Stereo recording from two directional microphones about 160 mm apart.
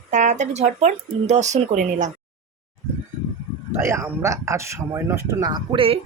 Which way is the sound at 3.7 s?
15° right (ahead or behind).